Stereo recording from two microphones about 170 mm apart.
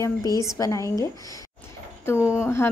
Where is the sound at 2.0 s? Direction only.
15° left (ahead or behind).